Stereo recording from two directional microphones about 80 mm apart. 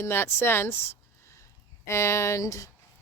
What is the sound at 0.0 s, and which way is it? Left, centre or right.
Speech, left.